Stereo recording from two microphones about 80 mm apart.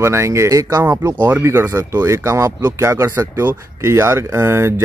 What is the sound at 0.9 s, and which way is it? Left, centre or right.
Speech, right.